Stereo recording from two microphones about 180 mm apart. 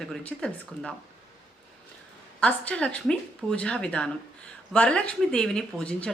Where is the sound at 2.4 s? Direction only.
5° left (ahead or behind).